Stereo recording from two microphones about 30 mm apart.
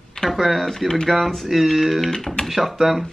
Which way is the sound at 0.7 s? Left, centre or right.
Centre.